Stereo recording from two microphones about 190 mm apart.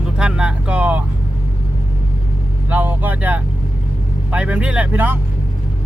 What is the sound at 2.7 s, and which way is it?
Speech, 10° right (ahead or behind).